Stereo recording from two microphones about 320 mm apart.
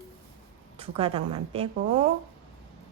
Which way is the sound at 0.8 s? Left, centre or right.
Centre.